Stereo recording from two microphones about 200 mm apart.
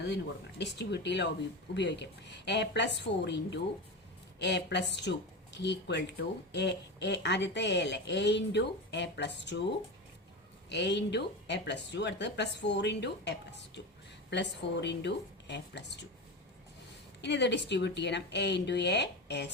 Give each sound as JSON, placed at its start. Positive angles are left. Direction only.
{"t": 0.6, "sound": "speech", "side_deg": 60}
{"t": 10.7, "sound": "speech", "side_deg": 60}
{"t": 17.2, "sound": "speech", "side_deg": 60}